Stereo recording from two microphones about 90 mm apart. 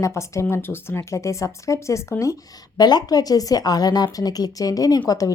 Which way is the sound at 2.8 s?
50° left (ahead or behind).